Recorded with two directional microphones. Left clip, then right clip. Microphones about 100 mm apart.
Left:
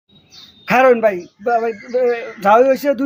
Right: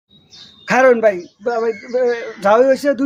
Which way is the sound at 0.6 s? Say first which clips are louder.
Even; 35° right (ahead or behind).